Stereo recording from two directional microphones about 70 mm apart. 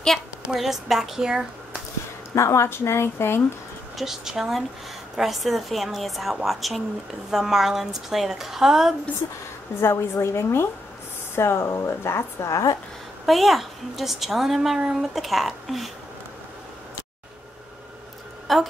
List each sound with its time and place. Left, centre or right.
0.5 s a woman's voice: centre
2.3 s speech: left
4.0 s a woman's voice: centre
9.2 s a woman's voice: left
9.8 s speech: left
13.2 s a woman's voice: centre
18.5 s a woman's voice: centre